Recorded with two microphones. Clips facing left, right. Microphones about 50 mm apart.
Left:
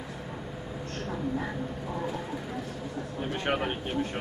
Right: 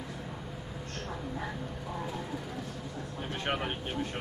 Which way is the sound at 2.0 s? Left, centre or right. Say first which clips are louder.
Left 3 dB; centre.